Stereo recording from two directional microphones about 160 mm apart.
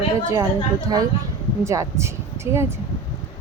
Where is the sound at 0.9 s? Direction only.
25° right (ahead or behind).